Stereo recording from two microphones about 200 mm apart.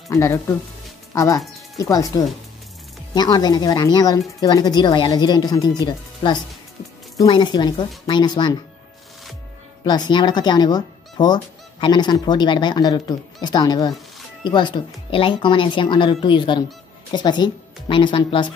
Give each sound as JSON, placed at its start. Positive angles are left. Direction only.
{"t": 0.1, "sound": "speech", "side_deg": 15}
{"t": 9.8, "sound": "speech", "side_deg": 20}